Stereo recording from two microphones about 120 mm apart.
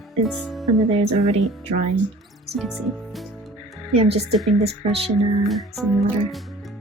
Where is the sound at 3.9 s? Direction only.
60° right (ahead or behind).